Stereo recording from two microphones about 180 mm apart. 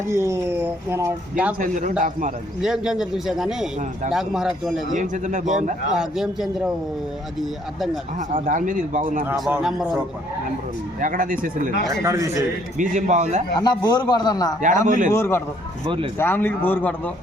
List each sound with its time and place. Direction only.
0.1 s speech: 15° right (ahead or behind)
1.5 s speech: 45° right (ahead or behind)
2.6 s a man's voice: 5° right (ahead or behind)
4.9 s speech: 45° right (ahead or behind)
5.9 s a man's voice: centre (ahead or behind)
8.3 s speech: 45° right (ahead or behind)
9.5 s a man's voice: 5° right (ahead or behind)
11.0 s speech: 50° right (ahead or behind)
12.0 s speech: 15° right (ahead or behind)
12.7 s speech: 45° right (ahead or behind)
13.6 s a man's voice: 25° left (ahead or behind)
14.8 s speech: 45° right (ahead or behind)
15.1 s speech: 15° left (ahead or behind)